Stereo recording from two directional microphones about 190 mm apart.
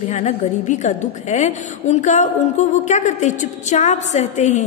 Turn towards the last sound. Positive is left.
turn(degrees=40)  # may be behind; listen again after turning